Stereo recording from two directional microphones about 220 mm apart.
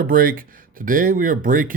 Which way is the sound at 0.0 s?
40° right (ahead or behind).